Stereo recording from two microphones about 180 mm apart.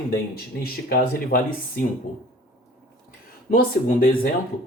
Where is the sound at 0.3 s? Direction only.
55° left (ahead or behind).